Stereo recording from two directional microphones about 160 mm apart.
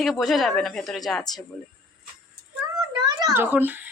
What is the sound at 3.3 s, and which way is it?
Speech, 10° right (ahead or behind).